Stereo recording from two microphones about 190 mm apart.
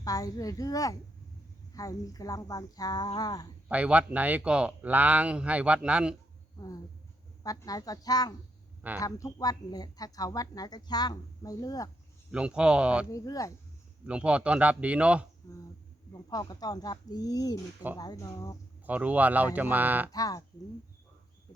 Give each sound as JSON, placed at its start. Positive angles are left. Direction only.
{"t": 0.0, "sound": "a child's voice", "side_deg": 20}
{"t": 3.7, "sound": "speech", "side_deg": -5}
{"t": 6.6, "sound": "speech", "side_deg": 20}
{"t": 12.3, "sound": "speech", "side_deg": -5}
{"t": 13.1, "sound": "a child's voice", "side_deg": 15}
{"t": 14.1, "sound": "speech", "side_deg": -5}
{"t": 16.1, "sound": "speech", "side_deg": 20}
{"t": 18.9, "sound": "speech", "side_deg": -10}
{"t": 20.1, "sound": "speech", "side_deg": 20}